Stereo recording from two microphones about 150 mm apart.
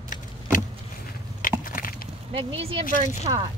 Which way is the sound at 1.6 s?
70° left (ahead or behind).